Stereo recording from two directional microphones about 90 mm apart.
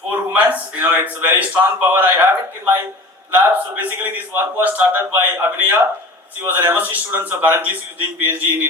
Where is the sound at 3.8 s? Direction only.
20° right (ahead or behind).